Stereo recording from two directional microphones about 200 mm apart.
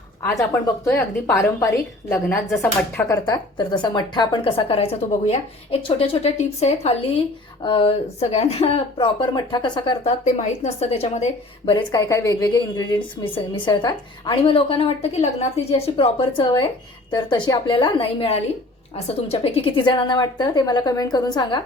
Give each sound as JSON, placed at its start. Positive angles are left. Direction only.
{"t": 1.4, "sound": "a woman's voice", "side_deg": 15}
{"t": 10.2, "sound": "a woman's voice", "side_deg": 35}
{"t": 11.6, "sound": "a woman's voice", "side_deg": 20}